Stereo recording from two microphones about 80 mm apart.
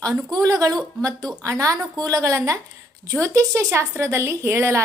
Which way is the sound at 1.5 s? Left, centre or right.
Right.